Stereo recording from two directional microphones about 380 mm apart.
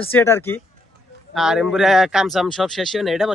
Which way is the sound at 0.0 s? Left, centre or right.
Centre.